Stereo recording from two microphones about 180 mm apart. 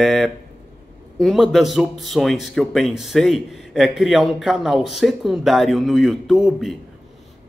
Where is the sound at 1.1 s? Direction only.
Centre (ahead or behind).